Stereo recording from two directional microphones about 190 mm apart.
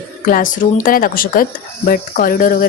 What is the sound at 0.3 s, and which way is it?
Speech, 45° left (ahead or behind).